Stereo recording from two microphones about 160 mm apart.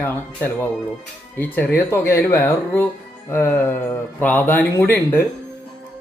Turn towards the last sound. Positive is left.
turn(degrees=15)  # may be behind; listen again after turning